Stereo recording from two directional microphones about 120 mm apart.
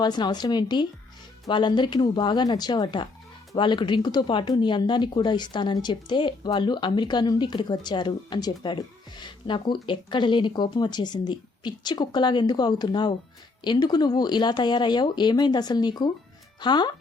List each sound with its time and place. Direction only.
0.0 s speech: 35° left (ahead or behind)